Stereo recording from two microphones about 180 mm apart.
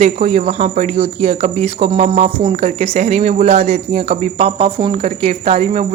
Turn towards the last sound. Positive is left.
turn(degrees=-40)  # may be behind; listen again after turning